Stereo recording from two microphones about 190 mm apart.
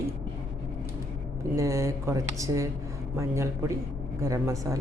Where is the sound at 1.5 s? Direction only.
15° right (ahead or behind).